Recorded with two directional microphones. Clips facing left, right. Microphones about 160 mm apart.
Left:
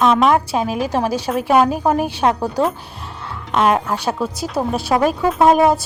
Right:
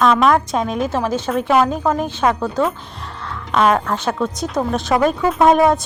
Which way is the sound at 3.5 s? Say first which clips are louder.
Even; 10° left (ahead or behind).